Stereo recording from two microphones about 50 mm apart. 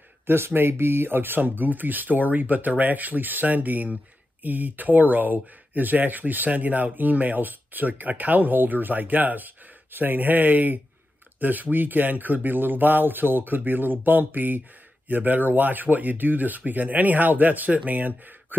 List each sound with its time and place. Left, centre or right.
0.5 s speech: right